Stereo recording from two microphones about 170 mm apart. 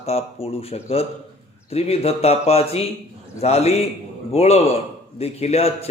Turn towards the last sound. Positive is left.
turn(degrees=40)  # may be behind; listen again after turning